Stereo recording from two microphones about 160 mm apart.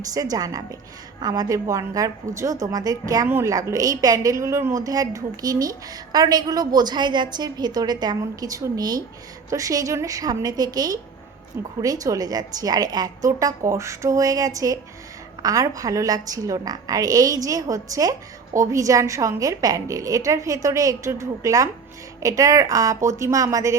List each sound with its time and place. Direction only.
0.1 s a woman's voice: 25° right (ahead or behind)